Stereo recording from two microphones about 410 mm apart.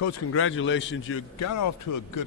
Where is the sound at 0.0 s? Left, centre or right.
Left.